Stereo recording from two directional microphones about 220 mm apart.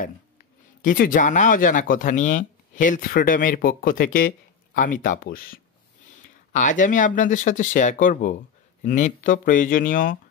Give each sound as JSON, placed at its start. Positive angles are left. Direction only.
{"t": 0.8, "sound": "speech", "side_deg": 40}